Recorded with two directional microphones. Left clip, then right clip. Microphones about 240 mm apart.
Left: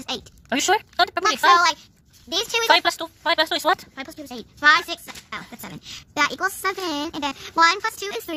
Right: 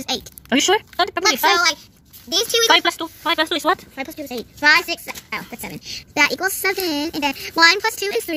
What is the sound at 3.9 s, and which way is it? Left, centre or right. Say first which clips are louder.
Speech: right 6 dB; left.